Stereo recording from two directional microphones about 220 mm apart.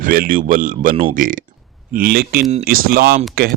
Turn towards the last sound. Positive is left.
turn(degrees=-45)  # may be behind; listen again after turning